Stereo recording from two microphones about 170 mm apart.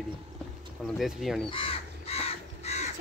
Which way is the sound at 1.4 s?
30° left (ahead or behind).